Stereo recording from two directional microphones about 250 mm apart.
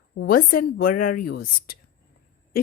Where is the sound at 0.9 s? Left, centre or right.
Left.